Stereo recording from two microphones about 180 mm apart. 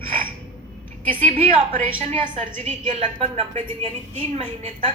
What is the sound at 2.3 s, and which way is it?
Speech, 45° right (ahead or behind).